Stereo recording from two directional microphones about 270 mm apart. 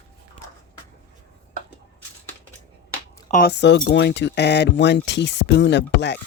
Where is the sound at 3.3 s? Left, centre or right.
Left.